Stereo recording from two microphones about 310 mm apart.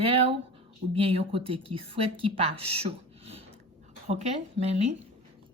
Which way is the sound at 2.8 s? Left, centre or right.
Centre.